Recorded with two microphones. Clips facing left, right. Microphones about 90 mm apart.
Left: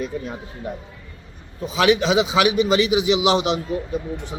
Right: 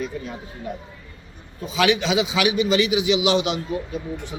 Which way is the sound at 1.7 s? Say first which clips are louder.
Left 3 dB; 40° left (ahead or behind).